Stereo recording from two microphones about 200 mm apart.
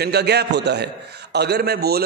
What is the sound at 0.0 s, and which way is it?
A man's voice, 55° right (ahead or behind).